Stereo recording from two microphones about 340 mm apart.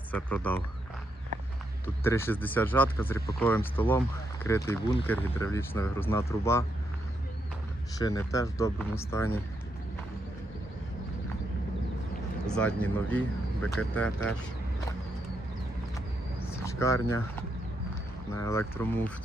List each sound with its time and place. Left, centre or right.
0.1 s speech: centre
2.0 s speech: centre
7.9 s speech: centre
12.5 s speech: centre
16.5 s a sound: centre
18.3 s speech: centre